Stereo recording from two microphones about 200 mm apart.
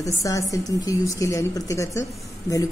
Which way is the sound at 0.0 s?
15° left (ahead or behind).